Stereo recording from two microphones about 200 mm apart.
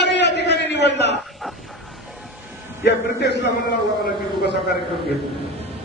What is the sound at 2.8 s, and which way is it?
Speech, 60° left (ahead or behind).